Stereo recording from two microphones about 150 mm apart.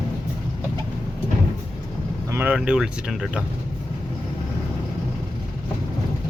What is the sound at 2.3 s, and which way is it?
Speech, 15° right (ahead or behind).